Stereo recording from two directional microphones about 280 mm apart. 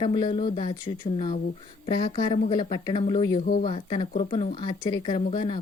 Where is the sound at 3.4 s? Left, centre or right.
Left.